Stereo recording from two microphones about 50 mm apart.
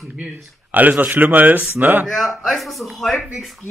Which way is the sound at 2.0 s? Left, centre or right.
Centre.